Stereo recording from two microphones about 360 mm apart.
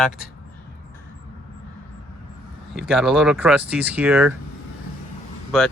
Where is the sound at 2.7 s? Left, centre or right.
Centre.